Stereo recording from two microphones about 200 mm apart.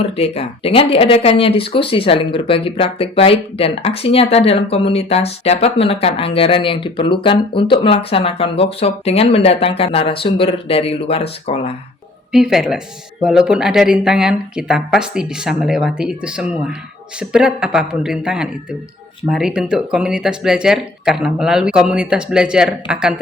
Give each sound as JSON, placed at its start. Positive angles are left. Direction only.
{"t": 0.2, "sound": "speech", "side_deg": 30}
{"t": 12.3, "sound": "speech", "side_deg": 0}